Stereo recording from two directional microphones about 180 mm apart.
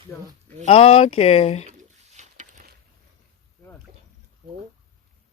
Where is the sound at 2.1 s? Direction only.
40° right (ahead or behind).